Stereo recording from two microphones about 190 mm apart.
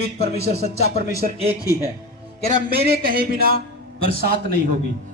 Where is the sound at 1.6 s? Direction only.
15° left (ahead or behind).